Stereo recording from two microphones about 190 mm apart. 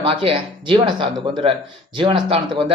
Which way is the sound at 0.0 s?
30° right (ahead or behind).